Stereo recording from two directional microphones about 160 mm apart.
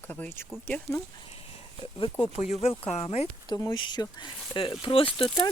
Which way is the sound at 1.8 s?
30° left (ahead or behind).